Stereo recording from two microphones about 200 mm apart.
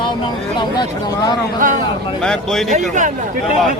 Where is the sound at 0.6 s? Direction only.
20° left (ahead or behind).